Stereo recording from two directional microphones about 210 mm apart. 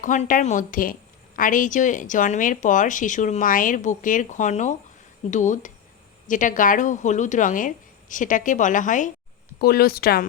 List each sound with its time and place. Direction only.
0.0 s a woman's voice: 35° left (ahead or behind)